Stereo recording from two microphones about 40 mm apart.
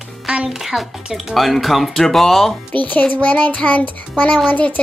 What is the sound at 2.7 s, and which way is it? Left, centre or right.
Child singing, left.